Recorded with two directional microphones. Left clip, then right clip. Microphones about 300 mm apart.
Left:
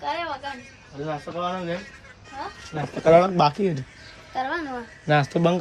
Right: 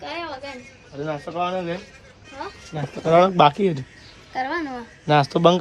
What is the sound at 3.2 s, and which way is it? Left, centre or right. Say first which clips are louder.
Speech: right 5 dB; right.